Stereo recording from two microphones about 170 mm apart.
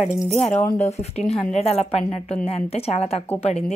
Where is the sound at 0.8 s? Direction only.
40° left (ahead or behind).